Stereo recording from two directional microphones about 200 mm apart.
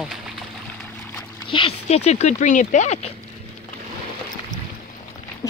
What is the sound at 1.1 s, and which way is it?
Speech, 20° left (ahead or behind).